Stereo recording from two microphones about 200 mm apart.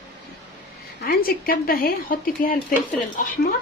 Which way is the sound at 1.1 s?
45° left (ahead or behind).